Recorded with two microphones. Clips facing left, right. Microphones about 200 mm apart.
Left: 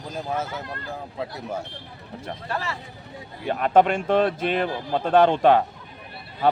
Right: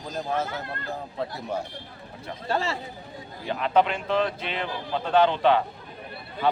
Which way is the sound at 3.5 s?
50° left (ahead or behind).